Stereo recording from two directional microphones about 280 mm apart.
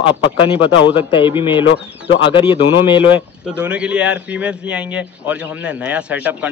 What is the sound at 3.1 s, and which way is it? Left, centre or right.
A man's voice, centre.